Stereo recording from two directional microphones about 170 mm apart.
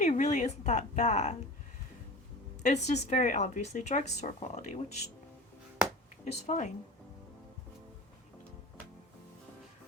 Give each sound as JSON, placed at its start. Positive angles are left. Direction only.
{"t": 0.0, "sound": "a woman's voice", "side_deg": 45}
{"t": 2.6, "sound": "speech", "side_deg": 45}
{"t": 6.4, "sound": "speech", "side_deg": 45}